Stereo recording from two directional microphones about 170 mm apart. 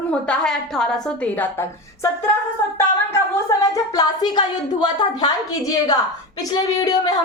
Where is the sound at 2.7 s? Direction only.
20° left (ahead or behind).